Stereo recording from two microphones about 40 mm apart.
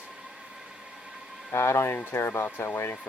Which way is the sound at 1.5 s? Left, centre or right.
Left.